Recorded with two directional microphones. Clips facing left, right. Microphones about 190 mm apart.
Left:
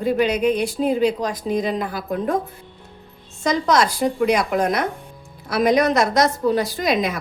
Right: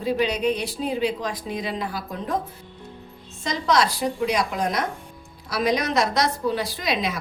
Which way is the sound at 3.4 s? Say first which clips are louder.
Left 4 dB; 45° left (ahead or behind).